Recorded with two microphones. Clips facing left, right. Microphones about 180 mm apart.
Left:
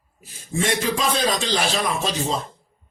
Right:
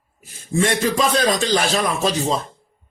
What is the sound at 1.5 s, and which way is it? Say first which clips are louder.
Speech: right 3 dB; 45° right (ahead or behind).